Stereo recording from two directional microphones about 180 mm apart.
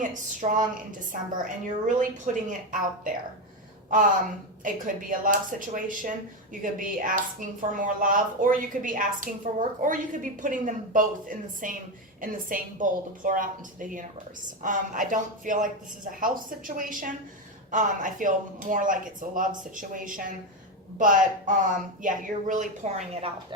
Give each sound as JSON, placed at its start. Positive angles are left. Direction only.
{"t": 0.0, "sound": "speech", "side_deg": -45}
{"t": 3.8, "sound": "speech", "side_deg": -45}